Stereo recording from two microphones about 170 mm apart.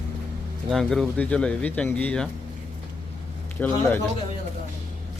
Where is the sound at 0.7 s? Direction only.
Centre (ahead or behind).